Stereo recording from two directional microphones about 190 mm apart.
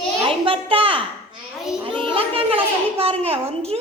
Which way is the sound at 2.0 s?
30° right (ahead or behind).